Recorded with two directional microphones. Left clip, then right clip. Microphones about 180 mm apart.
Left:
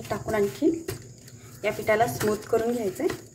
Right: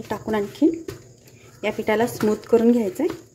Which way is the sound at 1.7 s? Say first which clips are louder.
Right 2 dB; 45° right (ahead or behind).